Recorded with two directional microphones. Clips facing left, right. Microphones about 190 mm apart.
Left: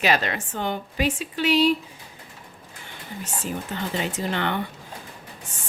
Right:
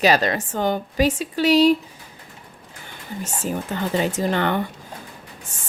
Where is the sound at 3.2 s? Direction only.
45° right (ahead or behind).